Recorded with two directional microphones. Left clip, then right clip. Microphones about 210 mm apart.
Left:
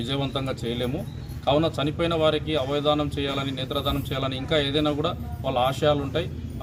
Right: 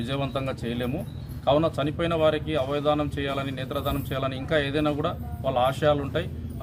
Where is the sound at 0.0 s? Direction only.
5° left (ahead or behind).